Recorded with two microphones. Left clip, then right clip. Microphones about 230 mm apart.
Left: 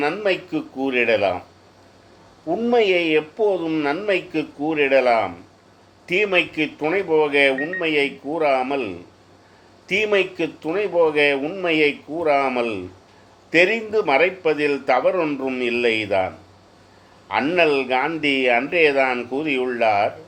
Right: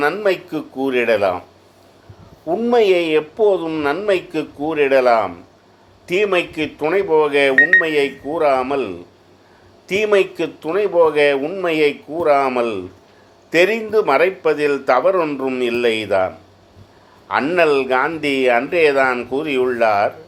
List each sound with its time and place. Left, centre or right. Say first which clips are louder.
0.0 s speech: right 4 dB; centre
2.5 s speech: right 3 dB; centre